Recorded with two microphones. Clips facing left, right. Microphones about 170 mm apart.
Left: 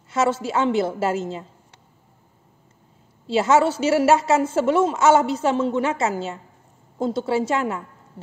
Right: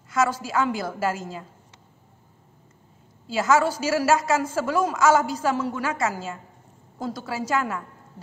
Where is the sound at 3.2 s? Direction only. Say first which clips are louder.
Left 3 dB; 30° left (ahead or behind).